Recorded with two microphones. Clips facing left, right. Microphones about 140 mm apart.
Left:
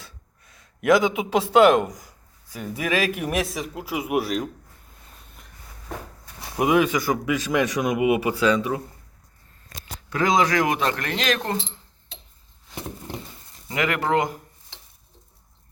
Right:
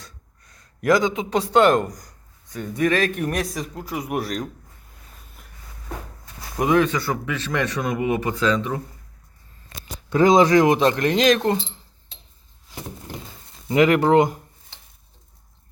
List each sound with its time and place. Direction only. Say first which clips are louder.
0.0 s speech: right 1 dB; 5° left (ahead or behind)
6.6 s speech: right 1 dB; 10° left (ahead or behind)
9.6 s speech: right 2 dB; 25° right (ahead or behind)
13.7 s speech: right 7 dB; 25° right (ahead or behind)